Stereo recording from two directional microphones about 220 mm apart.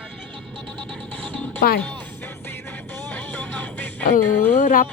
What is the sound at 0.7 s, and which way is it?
Music, 5° left (ahead or behind).